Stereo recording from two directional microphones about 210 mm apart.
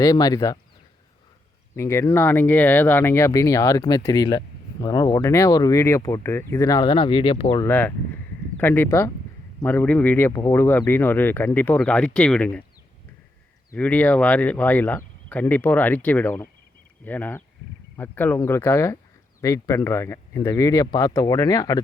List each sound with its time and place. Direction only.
0.0 s speech: 15° left (ahead or behind)
1.7 s speech: 15° left (ahead or behind)
7.6 s speech: 10° left (ahead or behind)
13.7 s speech: 5° left (ahead or behind)